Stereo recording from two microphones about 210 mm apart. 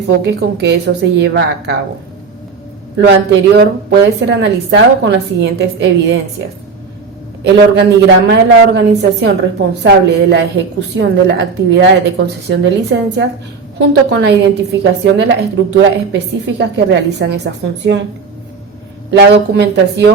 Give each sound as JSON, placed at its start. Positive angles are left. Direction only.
{"t": 0.2, "sound": "a woman's voice", "side_deg": -55}
{"t": 3.0, "sound": "a woman's voice", "side_deg": -55}
{"t": 19.1, "sound": "a woman's voice", "side_deg": -55}